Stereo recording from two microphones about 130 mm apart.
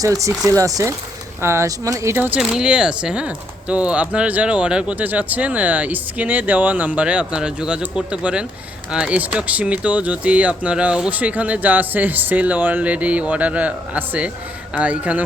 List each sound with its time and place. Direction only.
0.0 s speech: 25° right (ahead or behind); by 15.2 s 10° right (ahead or behind)